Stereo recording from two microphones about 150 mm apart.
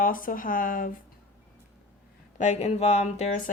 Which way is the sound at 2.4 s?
50° left (ahead or behind).